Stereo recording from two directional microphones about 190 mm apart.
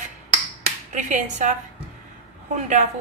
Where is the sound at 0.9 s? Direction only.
40° right (ahead or behind).